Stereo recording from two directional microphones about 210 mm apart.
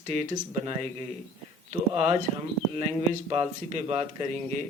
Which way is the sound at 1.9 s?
30° right (ahead or behind).